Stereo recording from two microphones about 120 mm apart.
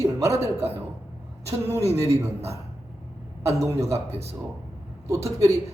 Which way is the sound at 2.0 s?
25° right (ahead or behind).